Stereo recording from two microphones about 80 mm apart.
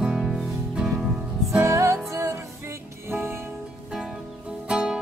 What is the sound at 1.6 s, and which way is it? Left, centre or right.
Music, right.